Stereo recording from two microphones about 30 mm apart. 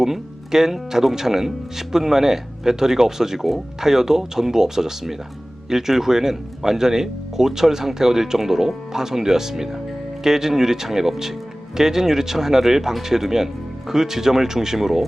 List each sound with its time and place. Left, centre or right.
0.0 s speech: centre